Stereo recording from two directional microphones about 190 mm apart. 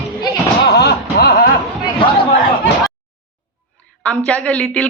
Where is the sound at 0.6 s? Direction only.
60° left (ahead or behind).